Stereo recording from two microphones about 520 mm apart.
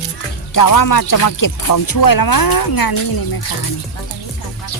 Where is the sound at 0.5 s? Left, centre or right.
Left.